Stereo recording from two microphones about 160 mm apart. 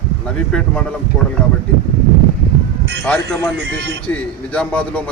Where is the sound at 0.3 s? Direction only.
5° left (ahead or behind).